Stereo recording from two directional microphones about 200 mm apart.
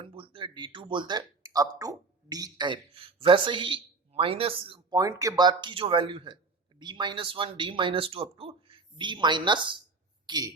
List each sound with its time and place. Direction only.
0.0 s speech: 25° right (ahead or behind)